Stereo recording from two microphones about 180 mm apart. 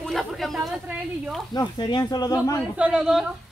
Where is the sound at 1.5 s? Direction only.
25° left (ahead or behind).